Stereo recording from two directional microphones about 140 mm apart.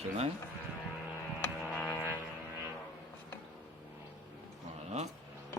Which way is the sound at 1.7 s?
15° left (ahead or behind).